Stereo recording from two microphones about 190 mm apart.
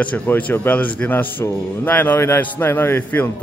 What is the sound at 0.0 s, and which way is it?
Speech, 5° left (ahead or behind).